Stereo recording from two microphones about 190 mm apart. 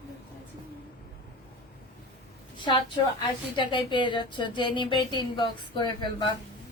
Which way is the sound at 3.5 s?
25° left (ahead or behind).